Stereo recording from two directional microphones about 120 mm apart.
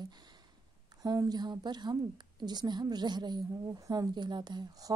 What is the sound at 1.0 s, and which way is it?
A woman's voice, 30° right (ahead or behind).